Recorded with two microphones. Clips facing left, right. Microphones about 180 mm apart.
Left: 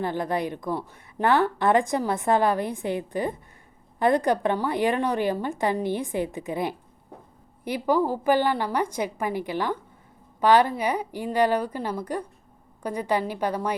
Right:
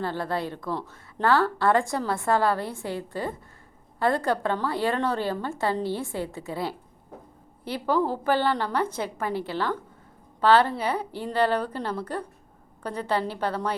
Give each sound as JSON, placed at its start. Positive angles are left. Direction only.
{"t": 0.0, "sound": "a woman's voice", "side_deg": 15}